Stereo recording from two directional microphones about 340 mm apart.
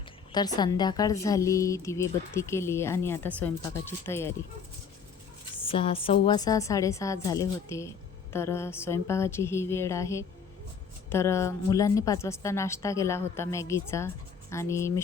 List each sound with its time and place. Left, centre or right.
0.3 s a woman's voice: centre
5.6 s a woman's voice: centre